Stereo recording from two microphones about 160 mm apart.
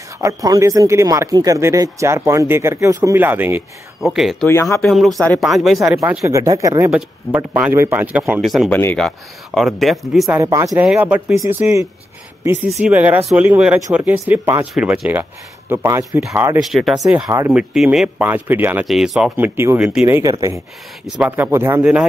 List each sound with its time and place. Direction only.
0.2 s speech: 20° right (ahead or behind)
4.0 s speech: centre (ahead or behind)
4.5 s speech: 15° left (ahead or behind)
4.8 s speech: centre (ahead or behind)
5.9 s speech: 20° right (ahead or behind)
6.9 s speech: 10° right (ahead or behind)
8.4 s speech: centre (ahead or behind)
10.4 s speech: 20° right (ahead or behind)
10.8 s speech: 10° right (ahead or behind)
12.8 s speech: 10° right (ahead or behind)
14.7 s speech: 5° right (ahead or behind); by 16.2 s 20° right (ahead or behind)
16.7 s speech: centre (ahead or behind)
17.1 s speech: 15° right (ahead or behind)
18.9 s speech: centre (ahead or behind)